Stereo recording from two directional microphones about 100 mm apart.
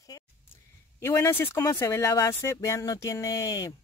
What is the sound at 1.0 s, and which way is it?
Speech, 30° left (ahead or behind).